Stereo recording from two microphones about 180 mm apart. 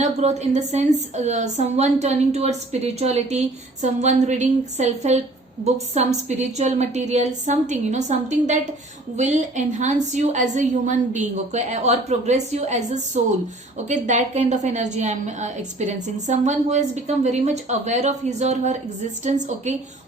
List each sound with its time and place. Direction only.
0.0 s a woman's voice: 40° right (ahead or behind)